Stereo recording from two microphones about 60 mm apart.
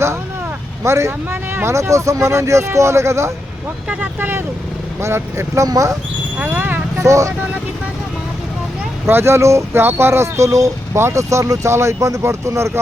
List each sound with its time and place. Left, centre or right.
0.9 s speech: right
3.8 s speech: right
4.9 s speech: right
5.6 s speech: right
6.4 s vehicle: right
7.0 s speech: right
9.0 s speech: right
10.9 s speech: right
11.7 s speech: right